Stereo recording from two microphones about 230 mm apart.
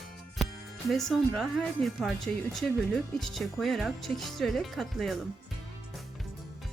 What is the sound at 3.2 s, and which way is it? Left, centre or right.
Speech, centre.